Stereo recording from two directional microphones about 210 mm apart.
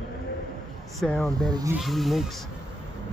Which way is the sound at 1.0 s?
5° left (ahead or behind).